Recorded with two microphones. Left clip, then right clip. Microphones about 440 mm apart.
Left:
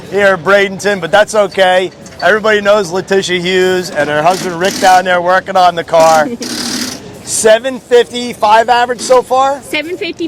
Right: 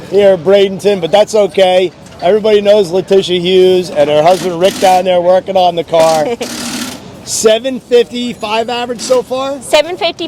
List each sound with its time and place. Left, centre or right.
0.3 s speech: left
2.2 s speech: left
2.6 s speech: centre
7.3 s speech: left
9.7 s a woman's voice: right